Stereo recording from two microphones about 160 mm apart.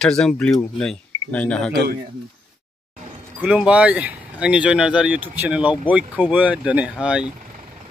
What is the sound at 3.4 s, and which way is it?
Speech, 5° right (ahead or behind).